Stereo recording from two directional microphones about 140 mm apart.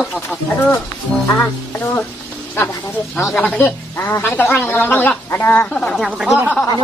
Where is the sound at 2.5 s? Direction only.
15° left (ahead or behind).